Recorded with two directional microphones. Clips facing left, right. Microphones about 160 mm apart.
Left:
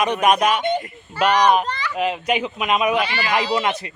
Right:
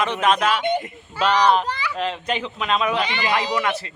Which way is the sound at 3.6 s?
20° left (ahead or behind).